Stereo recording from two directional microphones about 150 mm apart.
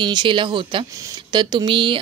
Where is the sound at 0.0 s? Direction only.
30° right (ahead or behind).